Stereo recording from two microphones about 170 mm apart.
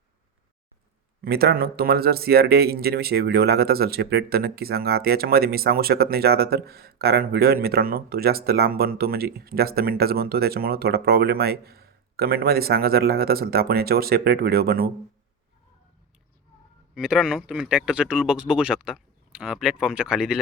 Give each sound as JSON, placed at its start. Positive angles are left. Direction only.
{"t": 1.2, "sound": "speech", "side_deg": -65}
{"t": 16.9, "sound": "speech", "side_deg": -5}